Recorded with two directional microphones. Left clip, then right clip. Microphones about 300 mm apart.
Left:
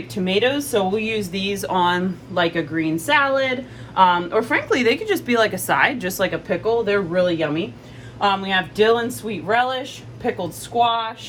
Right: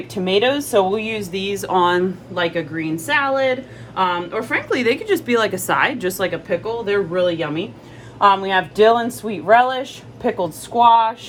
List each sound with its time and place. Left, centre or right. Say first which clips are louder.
0.1 s speech: right 2 dB; right; by 7.6 s centre
8.2 s speech: right 5 dB; centre